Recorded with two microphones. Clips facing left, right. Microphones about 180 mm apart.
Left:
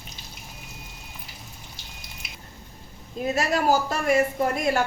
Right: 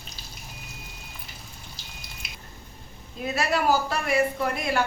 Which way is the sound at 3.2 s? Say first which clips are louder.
Left 1 dB; 45° left (ahead or behind).